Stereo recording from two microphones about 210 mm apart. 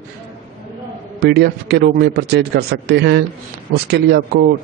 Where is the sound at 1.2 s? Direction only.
50° right (ahead or behind).